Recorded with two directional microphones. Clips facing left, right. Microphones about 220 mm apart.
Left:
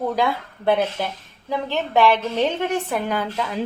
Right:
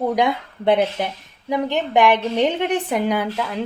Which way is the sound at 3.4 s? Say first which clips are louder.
Right 1 dB; centre (ahead or behind).